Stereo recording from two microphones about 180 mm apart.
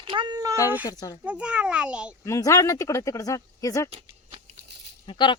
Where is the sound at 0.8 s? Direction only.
20° left (ahead or behind).